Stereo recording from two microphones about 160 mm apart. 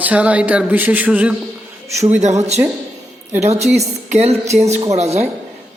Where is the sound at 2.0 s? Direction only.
45° right (ahead or behind).